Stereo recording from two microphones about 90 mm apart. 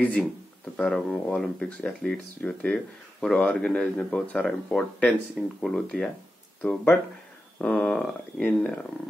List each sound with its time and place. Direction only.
0.0 s speech: 15° left (ahead or behind)